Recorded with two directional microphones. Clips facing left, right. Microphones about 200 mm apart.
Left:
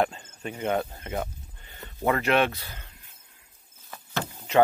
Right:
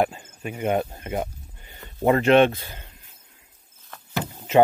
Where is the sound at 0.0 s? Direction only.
10° right (ahead or behind).